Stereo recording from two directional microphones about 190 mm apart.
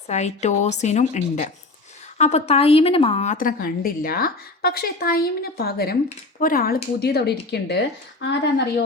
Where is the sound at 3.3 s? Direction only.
50° left (ahead or behind).